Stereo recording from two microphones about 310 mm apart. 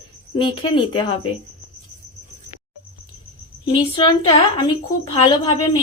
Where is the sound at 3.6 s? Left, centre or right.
Centre.